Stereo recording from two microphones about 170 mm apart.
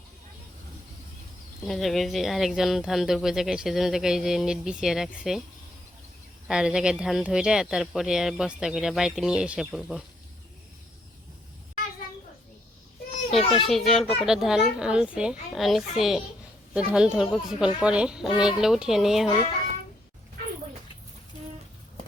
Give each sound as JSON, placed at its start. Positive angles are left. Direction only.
{"t": 1.6, "sound": "speech", "side_deg": 0}
{"t": 6.5, "sound": "speech", "side_deg": -5}
{"t": 13.6, "sound": "speech", "side_deg": 0}